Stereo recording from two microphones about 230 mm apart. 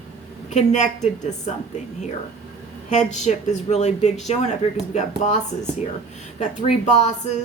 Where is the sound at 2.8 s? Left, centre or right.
Left.